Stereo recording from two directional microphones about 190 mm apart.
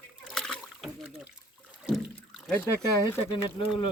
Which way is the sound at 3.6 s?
25° left (ahead or behind).